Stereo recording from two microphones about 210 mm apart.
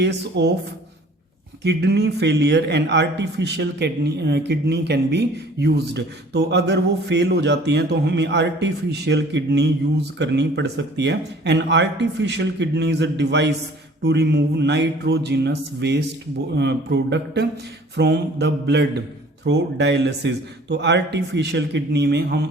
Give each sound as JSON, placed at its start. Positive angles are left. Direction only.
{"t": 0.0, "sound": "speech", "side_deg": -55}
{"t": 1.6, "sound": "speech", "side_deg": -50}